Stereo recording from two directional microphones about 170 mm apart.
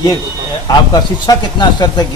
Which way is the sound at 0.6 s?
25° left (ahead or behind).